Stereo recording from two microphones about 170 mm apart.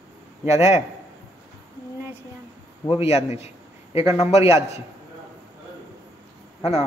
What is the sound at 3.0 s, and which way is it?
A man's voice, 35° left (ahead or behind).